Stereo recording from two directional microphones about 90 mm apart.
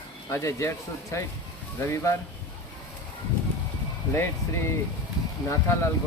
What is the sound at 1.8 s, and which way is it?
Speech, 30° left (ahead or behind).